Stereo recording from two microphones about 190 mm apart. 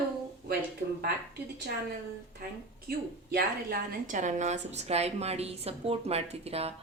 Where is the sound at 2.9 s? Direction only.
50° right (ahead or behind).